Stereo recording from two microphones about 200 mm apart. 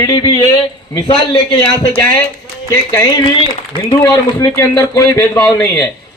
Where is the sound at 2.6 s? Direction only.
15° left (ahead or behind).